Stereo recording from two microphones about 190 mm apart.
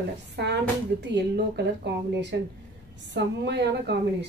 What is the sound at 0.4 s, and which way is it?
A woman's voice, 65° right (ahead or behind).